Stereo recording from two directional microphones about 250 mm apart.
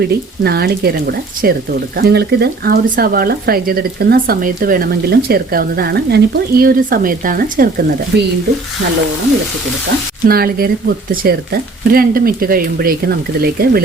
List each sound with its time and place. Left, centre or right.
0.0 s speech: right
10.2 s speech: right